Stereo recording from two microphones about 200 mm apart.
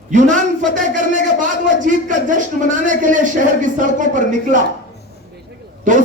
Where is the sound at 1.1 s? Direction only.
40° right (ahead or behind).